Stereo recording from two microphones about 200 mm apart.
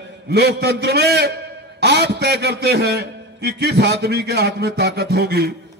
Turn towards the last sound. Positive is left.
turn(degrees=-50)  # may be behind; listen again after turning